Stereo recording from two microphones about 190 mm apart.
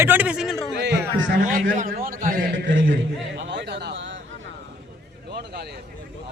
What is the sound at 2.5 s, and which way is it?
Speech, 80° right.